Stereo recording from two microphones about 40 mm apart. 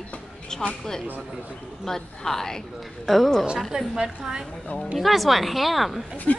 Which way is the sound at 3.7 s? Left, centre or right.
Centre.